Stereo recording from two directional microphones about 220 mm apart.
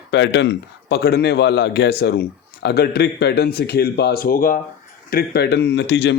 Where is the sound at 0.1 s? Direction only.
50° left (ahead or behind).